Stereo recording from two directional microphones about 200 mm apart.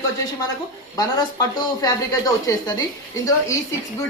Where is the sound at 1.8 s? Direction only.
20° left (ahead or behind).